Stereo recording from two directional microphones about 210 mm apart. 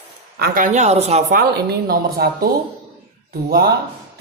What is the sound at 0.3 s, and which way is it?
A woman's voice, 45° right (ahead or behind).